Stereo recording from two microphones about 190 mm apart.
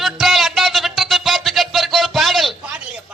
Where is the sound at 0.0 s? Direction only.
Centre (ahead or behind).